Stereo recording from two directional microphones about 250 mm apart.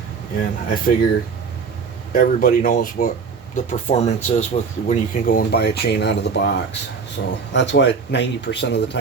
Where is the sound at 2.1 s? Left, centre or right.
Left.